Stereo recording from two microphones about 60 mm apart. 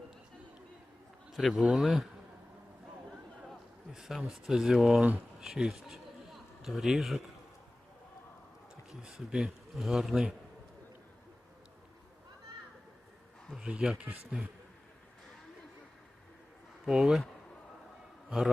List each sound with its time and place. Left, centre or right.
1.3 s a man's voice: centre
3.9 s a man's voice: centre
9.3 s speech: centre
13.6 s speech: centre
16.8 s speech: centre
18.3 s a man's voice: centre